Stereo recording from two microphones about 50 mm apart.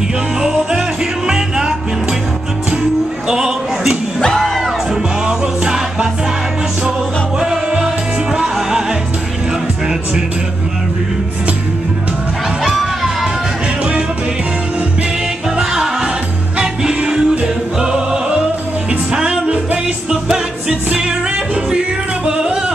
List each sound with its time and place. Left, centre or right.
0.4 s music: centre
3.3 s a sound: centre
4.4 s music: centre
5.2 s music: centre
7.3 s music: centre
12.6 s music: centre
15.5 s music: centre